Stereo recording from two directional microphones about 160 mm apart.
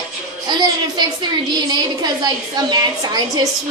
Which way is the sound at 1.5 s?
25° right (ahead or behind).